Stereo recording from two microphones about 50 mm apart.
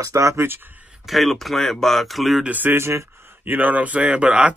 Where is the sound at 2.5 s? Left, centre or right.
Right.